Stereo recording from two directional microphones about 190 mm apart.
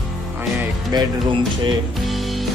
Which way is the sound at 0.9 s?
20° right (ahead or behind).